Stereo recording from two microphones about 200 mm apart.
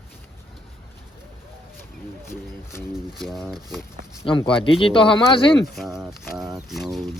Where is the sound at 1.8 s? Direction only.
10° left (ahead or behind).